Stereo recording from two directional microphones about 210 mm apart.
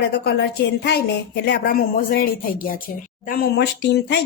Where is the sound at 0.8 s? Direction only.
55° left (ahead or behind).